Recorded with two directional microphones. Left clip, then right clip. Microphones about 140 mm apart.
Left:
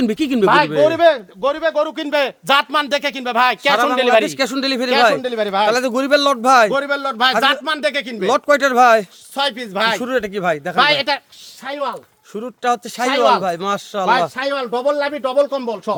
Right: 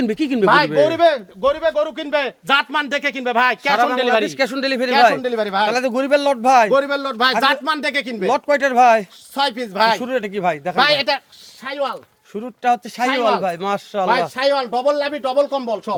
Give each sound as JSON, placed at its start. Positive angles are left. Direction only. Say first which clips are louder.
{"t": 0.0, "sound": "speech", "louder": "left 1 dB", "side_deg": 30}
{"t": 0.4, "sound": "speech", "louder": "left 1 dB", "side_deg": 5}
{"t": 2.0, "sound": "speech", "louder": "left 2 dB", "side_deg": 70}
{"t": 4.3, "sound": "speech", "louder": "even", "side_deg": 30}
{"t": 8.3, "sound": "speech", "louder": "left 3 dB", "side_deg": 45}
{"t": 9.3, "sound": "speech", "louder": "even", "side_deg": 20}
{"t": 10.0, "sound": "speech", "louder": "left 1 dB", "side_deg": 35}
{"t": 10.8, "sound": "speech", "louder": "left 1 dB", "side_deg": 20}
{"t": 12.3, "sound": "speech", "louder": "right 1 dB", "side_deg": 35}
{"t": 14.8, "sound": "speech", "louder": "even", "side_deg": 15}